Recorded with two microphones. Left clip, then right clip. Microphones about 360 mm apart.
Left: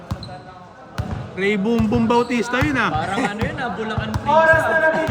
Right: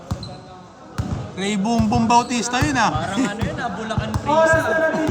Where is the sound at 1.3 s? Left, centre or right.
Centre.